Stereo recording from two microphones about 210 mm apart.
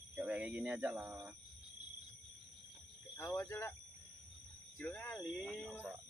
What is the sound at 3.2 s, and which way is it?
Speech, 15° left (ahead or behind).